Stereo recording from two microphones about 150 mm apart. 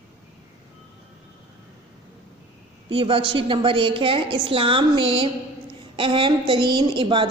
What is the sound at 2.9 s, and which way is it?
A woman's voice, 35° right (ahead or behind).